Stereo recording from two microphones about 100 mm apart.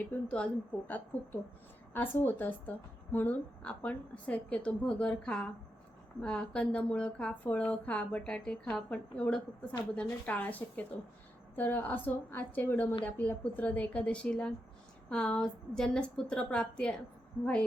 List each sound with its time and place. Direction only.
0.1 s a woman's voice: 10° left (ahead or behind)